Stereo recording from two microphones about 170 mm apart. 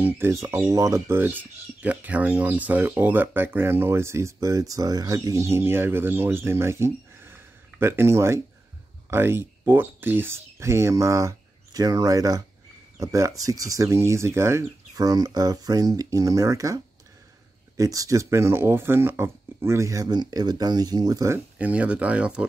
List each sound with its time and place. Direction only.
0.0 s speech: 15° right (ahead or behind)
21.5 s speech: 10° right (ahead or behind)